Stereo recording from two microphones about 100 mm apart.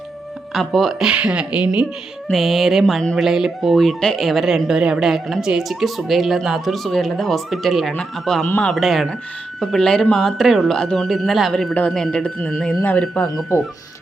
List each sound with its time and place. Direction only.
0.5 s speech: centre (ahead or behind)
2.3 s speech: centre (ahead or behind)
8.4 s speech: 15° left (ahead or behind)
8.7 s speech: centre (ahead or behind)
12.8 s speech: 20° left (ahead or behind)
13.5 s speech: 30° left (ahead or behind)